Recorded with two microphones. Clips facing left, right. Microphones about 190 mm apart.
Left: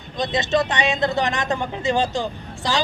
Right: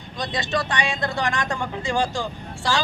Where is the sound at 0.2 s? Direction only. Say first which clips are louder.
Left 5 dB; 20° left (ahead or behind).